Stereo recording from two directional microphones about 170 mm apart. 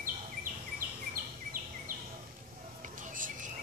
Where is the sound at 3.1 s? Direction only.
50° right (ahead or behind).